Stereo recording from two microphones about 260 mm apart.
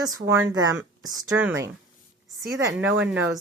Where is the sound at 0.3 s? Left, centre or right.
Centre.